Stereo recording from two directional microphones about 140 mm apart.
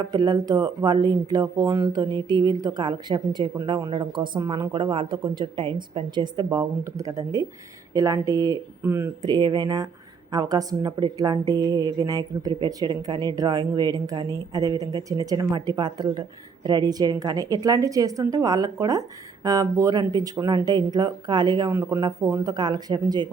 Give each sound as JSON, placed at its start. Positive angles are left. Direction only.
{"t": 0.1, "sound": "a woman's voice", "side_deg": -30}
{"t": 21.7, "sound": "a woman's voice", "side_deg": -20}